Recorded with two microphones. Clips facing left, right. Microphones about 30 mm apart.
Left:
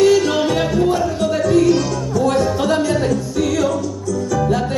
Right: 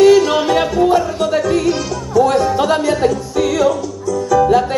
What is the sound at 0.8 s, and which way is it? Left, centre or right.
Music, centre.